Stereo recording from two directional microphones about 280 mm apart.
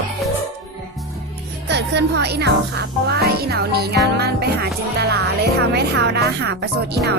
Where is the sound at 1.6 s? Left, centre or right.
Right.